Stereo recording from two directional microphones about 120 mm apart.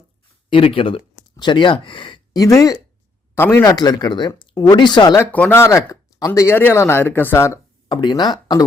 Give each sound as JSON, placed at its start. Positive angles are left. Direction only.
{"t": 0.5, "sound": "speech", "side_deg": 50}
{"t": 3.3, "sound": "speech", "side_deg": 20}
{"t": 3.6, "sound": "speech", "side_deg": 30}
{"t": 5.1, "sound": "speech", "side_deg": 15}
{"t": 7.9, "sound": "speech", "side_deg": 35}